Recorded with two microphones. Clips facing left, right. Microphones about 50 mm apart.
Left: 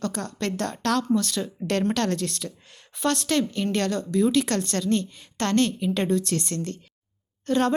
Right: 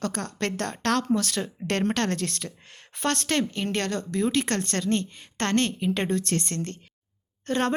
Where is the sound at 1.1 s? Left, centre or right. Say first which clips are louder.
Left 1 dB; right.